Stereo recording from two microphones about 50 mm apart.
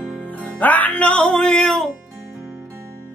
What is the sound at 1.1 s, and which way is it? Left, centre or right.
Music, centre.